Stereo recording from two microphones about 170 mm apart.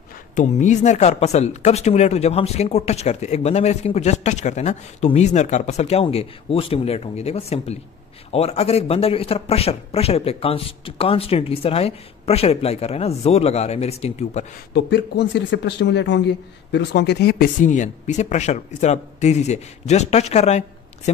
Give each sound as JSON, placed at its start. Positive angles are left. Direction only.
{"t": 0.4, "sound": "speech", "side_deg": 45}
{"t": 14.7, "sound": "speech", "side_deg": 85}
{"t": 17.6, "sound": "speech", "side_deg": 45}